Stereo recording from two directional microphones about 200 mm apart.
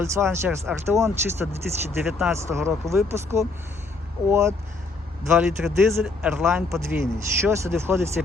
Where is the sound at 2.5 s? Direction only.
10° right (ahead or behind).